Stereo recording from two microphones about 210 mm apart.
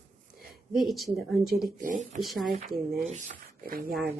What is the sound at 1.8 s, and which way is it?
Speech, 40° right (ahead or behind).